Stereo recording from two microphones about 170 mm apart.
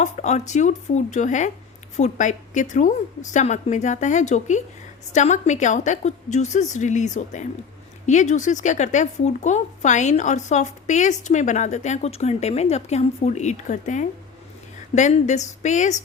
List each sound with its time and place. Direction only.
0.0 s speech: 45° left (ahead or behind)